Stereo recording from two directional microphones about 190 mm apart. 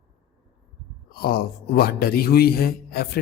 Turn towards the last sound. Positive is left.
turn(degrees=55)  # may be behind; listen again after turning